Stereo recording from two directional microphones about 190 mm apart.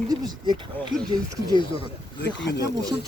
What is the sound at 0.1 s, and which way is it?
Speech, 25° right (ahead or behind).